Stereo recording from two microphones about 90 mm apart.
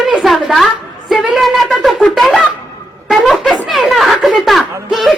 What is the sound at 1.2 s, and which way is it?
Wind instrument, centre (ahead or behind).